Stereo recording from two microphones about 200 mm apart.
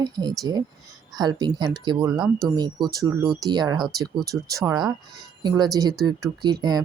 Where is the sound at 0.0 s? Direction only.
20° right (ahead or behind).